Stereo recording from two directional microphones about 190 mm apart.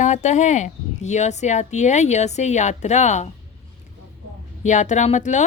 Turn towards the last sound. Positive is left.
turn(degrees=40)  # may be behind; listen again after turning